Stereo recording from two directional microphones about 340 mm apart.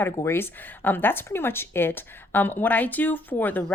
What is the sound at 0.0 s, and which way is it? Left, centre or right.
Speech, centre.